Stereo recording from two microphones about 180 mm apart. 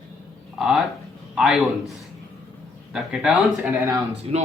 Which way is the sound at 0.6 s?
Centre (ahead or behind).